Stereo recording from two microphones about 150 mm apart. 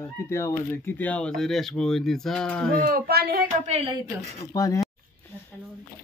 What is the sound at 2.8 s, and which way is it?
Speech, 85° right.